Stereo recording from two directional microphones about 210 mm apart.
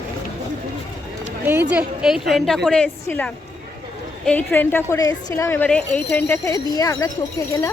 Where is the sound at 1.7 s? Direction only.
5° right (ahead or behind); by 7.1 s 15° left (ahead or behind).